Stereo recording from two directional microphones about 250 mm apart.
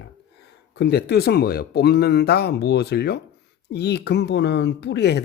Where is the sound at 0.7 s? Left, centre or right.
Left.